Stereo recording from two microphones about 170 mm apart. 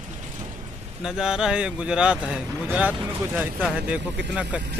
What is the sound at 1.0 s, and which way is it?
Speech, 5° right (ahead or behind).